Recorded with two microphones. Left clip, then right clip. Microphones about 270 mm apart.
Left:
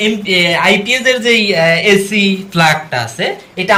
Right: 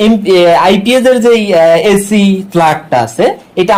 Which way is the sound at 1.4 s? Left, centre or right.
Right.